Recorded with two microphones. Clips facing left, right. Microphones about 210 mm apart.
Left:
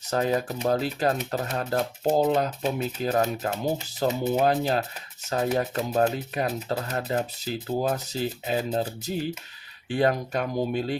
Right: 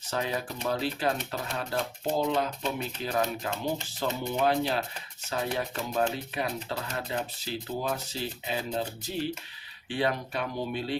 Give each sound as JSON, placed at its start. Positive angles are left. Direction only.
{"t": 0.0, "sound": "speech", "side_deg": 40}